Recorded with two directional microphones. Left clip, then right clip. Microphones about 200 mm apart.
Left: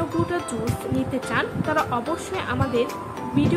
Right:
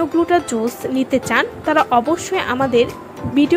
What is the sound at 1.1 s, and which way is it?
Speech, 35° right (ahead or behind).